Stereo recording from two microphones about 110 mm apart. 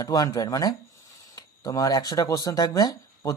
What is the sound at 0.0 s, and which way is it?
Speech, 35° left (ahead or behind).